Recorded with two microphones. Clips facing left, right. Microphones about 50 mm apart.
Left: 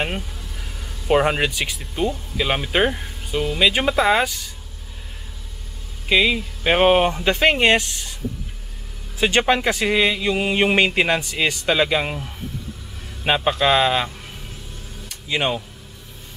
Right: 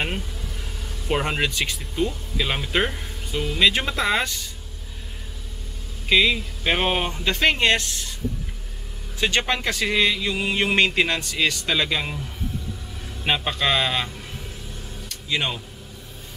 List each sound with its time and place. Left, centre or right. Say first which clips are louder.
1.0 s speech: left 6 dB; centre
6.0 s speech: left 1 dB; centre
9.2 s speech: left 5 dB; centre
13.2 s speech: left 4 dB; centre
15.0 s a sound: left 4 dB; centre